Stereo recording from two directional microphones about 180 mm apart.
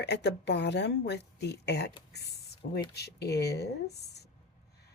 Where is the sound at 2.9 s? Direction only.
65° left (ahead or behind).